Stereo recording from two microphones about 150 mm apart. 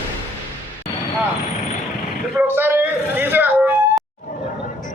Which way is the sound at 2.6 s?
15° right (ahead or behind).